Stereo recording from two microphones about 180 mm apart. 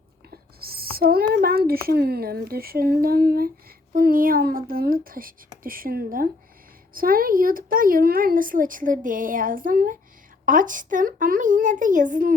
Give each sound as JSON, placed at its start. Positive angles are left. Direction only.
{"t": 0.3, "sound": "whispering", "side_deg": -55}
{"t": 1.3, "sound": "speech", "side_deg": -55}